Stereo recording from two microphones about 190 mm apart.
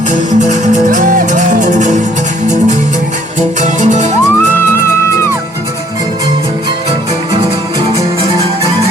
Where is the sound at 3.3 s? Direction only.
40° right (ahead or behind).